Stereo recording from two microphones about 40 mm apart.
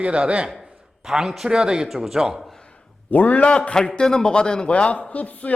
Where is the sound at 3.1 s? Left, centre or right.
Left.